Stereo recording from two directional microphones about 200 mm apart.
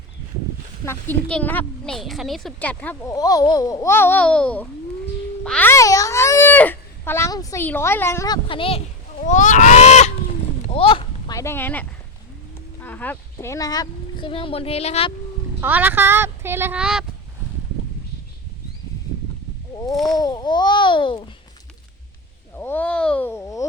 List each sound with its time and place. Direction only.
0.9 s a child's voice: 10° left (ahead or behind)
8.4 s a child's voice: 25° left (ahead or behind)
9.2 s a sound: 40° left (ahead or behind); by 11.9 s 10° left (ahead or behind)
12.8 s speech: 10° left (ahead or behind); by 15.1 s 30° left (ahead or behind)
15.6 s speech: 10° right (ahead or behind)
20.1 s a child's voice: 20° left (ahead or behind)
22.5 s speech: 10° left (ahead or behind)